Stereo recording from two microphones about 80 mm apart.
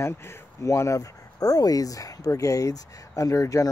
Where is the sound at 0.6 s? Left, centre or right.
Left.